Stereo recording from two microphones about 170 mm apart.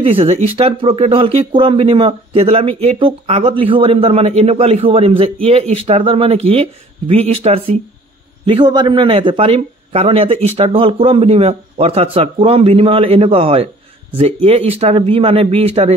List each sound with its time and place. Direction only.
0.0 s speech: 35° right (ahead or behind)
8.5 s speech: 25° right (ahead or behind)